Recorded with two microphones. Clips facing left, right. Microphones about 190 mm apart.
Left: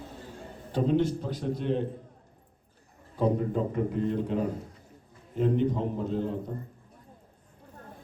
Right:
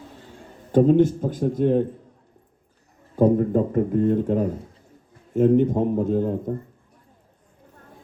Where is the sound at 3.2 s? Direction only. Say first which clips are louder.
Right 8 dB; 50° right (ahead or behind).